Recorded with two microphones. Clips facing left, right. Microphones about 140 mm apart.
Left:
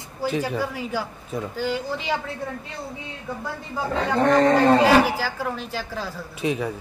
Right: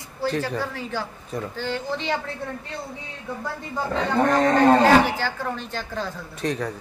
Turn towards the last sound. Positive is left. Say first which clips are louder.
# left 2 dB
turn(degrees=5)  # may be behind; listen again after turning